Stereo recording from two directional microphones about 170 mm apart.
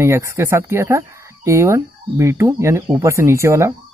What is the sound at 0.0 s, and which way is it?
Speech, 15° right (ahead or behind).